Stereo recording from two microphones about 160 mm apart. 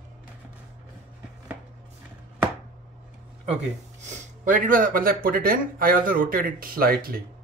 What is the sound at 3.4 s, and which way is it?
Speech, 45° right (ahead or behind).